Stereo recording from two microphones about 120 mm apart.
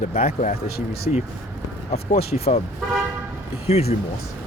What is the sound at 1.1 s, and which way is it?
Speech, 90° left.